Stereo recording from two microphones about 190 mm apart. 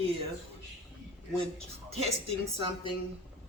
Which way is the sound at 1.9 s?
35° right (ahead or behind).